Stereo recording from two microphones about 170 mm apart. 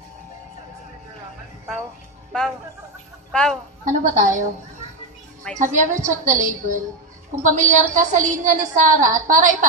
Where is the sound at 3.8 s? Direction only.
45° right (ahead or behind).